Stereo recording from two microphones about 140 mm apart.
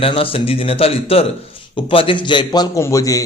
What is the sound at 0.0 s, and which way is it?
A man's voice, 40° left (ahead or behind).